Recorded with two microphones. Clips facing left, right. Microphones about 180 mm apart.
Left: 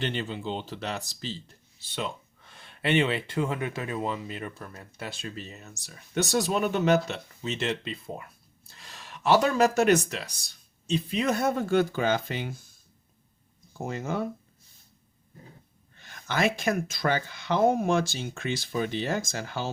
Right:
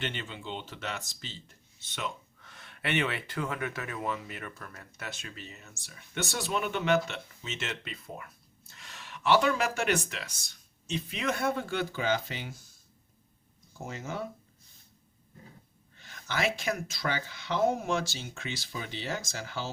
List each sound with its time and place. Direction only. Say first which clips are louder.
0.0 s speech: left 6 dB; 35° left (ahead or behind); by 12.5 s 55° left (ahead or behind)
13.8 s speech: left 6 dB; 55° left (ahead or behind)
16.2 s speech: left 5 dB; 50° left (ahead or behind)